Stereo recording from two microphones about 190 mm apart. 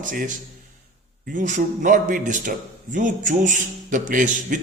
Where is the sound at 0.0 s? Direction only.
40° right (ahead or behind).